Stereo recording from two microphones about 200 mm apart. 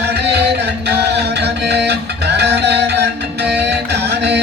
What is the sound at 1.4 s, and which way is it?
Music, 55° right (ahead or behind).